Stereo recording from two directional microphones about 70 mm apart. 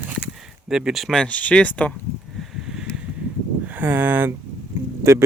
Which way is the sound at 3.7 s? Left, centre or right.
Right.